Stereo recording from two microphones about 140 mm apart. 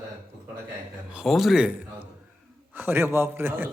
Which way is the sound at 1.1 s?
5° right (ahead or behind).